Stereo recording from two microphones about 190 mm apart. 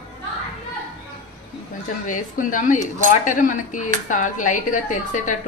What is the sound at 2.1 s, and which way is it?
A woman's voice, 45° left (ahead or behind).